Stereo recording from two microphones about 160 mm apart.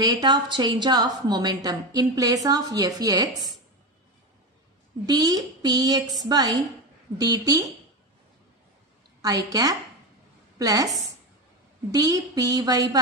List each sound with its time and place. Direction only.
0.0 s a woman's voice: 25° right (ahead or behind)
5.0 s a woman's voice: 25° right (ahead or behind)
9.2 s a woman's voice: 25° right (ahead or behind)
11.9 s a woman's voice: 20° right (ahead or behind)